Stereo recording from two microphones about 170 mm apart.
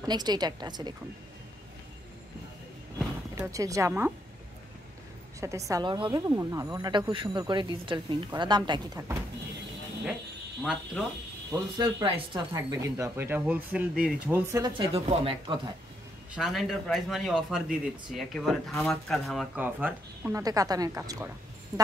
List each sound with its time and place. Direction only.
0.0 s speech: 25° right (ahead or behind)
3.3 s speech: 20° right (ahead or behind)
5.7 s speech: 25° right (ahead or behind)
10.6 s a man's voice: 5° right (ahead or behind)
11.5 s speech: 25° right (ahead or behind)
14.8 s speech: 35° right (ahead or behind)
16.3 s a man's voice: centre (ahead or behind)
20.4 s speech: 20° right (ahead or behind)
21.7 s music: 20° right (ahead or behind)